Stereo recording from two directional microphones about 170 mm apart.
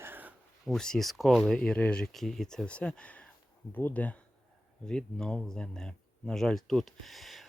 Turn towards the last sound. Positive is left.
turn(degrees=0)  # may be behind; listen again after turning